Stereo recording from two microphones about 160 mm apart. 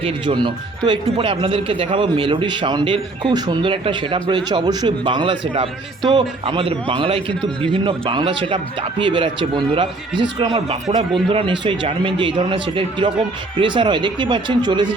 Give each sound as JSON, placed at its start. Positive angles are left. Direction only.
{"t": 0.0, "sound": "speech", "side_deg": -30}